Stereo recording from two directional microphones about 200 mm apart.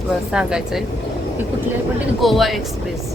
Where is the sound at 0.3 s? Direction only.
5° right (ahead or behind).